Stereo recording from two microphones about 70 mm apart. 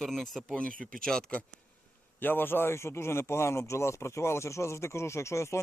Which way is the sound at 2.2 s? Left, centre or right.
Left.